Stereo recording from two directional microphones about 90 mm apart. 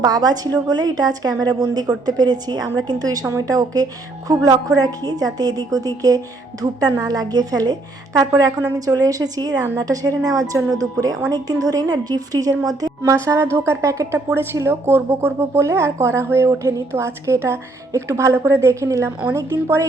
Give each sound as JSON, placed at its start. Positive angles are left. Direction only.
{"t": 0.0, "sound": "a woman's voice", "side_deg": -50}